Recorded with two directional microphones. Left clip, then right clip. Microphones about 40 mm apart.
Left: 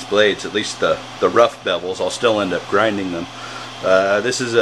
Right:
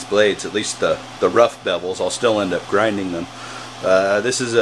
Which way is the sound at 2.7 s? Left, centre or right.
Right.